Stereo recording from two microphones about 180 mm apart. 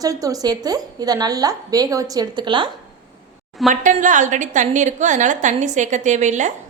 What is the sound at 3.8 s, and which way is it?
A woman's voice, 45° right (ahead or behind).